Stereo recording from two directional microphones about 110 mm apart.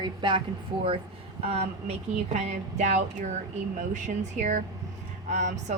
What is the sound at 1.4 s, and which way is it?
A woman's voice, 70° right (ahead or behind).